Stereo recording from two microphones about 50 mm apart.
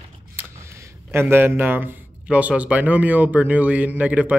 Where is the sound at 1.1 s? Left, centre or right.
Right.